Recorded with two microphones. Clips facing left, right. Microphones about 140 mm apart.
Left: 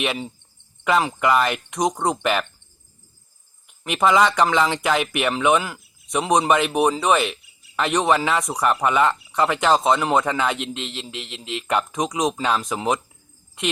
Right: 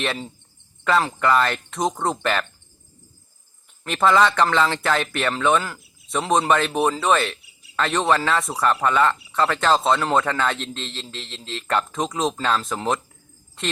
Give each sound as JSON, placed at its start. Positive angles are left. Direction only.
{"t": 0.0, "sound": "speech", "side_deg": 10}
{"t": 3.7, "sound": "speech", "side_deg": 15}